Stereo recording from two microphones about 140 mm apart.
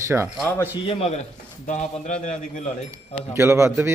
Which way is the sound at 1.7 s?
60° left (ahead or behind).